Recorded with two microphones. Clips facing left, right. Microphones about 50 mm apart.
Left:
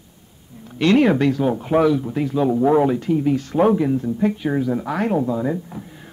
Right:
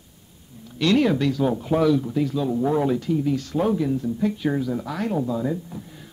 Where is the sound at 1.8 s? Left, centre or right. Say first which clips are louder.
Left 2 dB; left.